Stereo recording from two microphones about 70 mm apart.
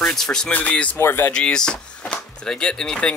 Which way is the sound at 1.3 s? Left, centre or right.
Centre.